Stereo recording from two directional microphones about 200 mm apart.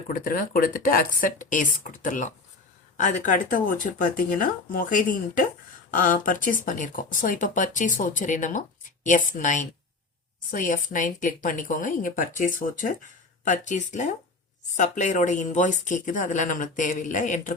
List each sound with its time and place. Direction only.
0.1 s speech: 45° left (ahead or behind)